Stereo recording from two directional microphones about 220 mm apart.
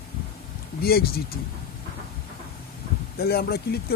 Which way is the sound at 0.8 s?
45° left (ahead or behind).